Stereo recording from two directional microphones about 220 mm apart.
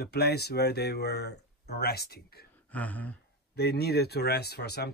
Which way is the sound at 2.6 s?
5° left (ahead or behind).